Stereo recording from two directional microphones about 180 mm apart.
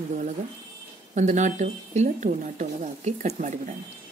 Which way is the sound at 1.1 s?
40° right (ahead or behind).